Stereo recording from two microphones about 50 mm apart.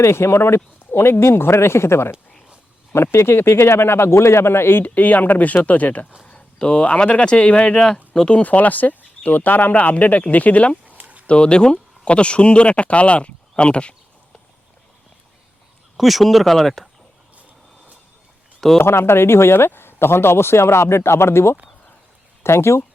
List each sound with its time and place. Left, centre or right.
0.0 s speech: left
4.8 s speech: left
6.2 s speech: left
8.4 s speech: left
10.8 s a sound: right
11.3 s speech: left
16.0 s speech: centre
18.9 s speech: left